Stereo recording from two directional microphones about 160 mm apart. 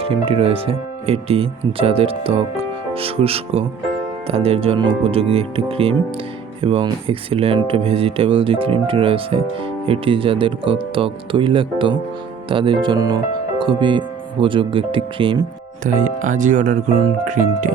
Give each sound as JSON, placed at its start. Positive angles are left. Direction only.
{"t": 0.0, "sound": "speech", "side_deg": -35}
{"t": 15.9, "sound": "speech", "side_deg": -55}